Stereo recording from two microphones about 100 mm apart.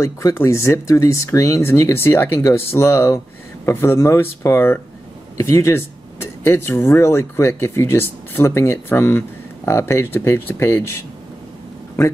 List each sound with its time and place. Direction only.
0.0 s speech: 30° left (ahead or behind)